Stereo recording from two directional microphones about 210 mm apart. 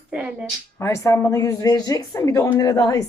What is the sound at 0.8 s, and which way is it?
Speech, 15° left (ahead or behind).